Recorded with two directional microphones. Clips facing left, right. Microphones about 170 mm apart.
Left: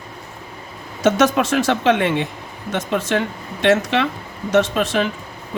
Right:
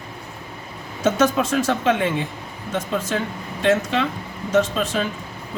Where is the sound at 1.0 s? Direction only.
80° left.